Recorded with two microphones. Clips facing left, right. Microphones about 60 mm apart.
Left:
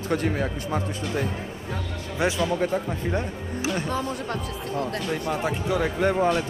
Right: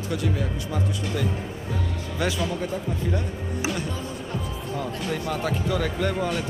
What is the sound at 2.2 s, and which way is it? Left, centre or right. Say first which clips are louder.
Speech: left 2 dB; left.